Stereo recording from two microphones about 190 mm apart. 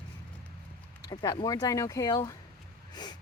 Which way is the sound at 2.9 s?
20° left (ahead or behind).